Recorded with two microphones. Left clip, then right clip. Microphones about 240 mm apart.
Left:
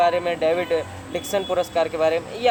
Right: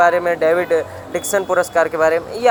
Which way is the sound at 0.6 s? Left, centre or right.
Right.